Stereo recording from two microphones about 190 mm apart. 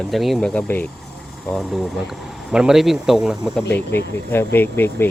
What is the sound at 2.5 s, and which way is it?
Speech, 5° right (ahead or behind).